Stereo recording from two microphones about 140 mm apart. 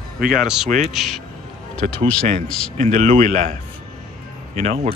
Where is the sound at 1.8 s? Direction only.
60° right (ahead or behind).